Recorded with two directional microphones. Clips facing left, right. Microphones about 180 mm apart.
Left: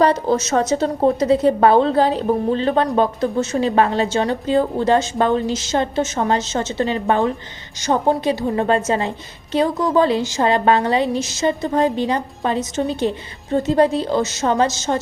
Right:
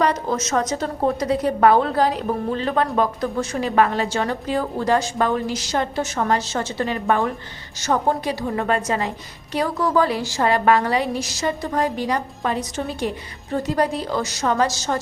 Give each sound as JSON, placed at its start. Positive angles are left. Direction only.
{"t": 0.0, "sound": "a woman's voice", "side_deg": 30}